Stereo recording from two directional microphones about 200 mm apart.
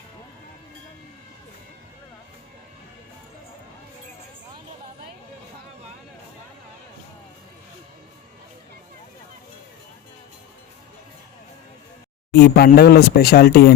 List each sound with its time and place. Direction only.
12.3 s speech: 50° left (ahead or behind)